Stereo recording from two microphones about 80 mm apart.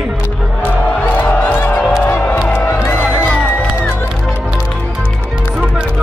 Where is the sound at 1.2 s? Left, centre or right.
Centre.